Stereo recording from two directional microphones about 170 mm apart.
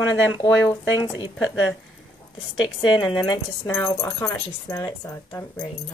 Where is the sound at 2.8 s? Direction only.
30° left (ahead or behind).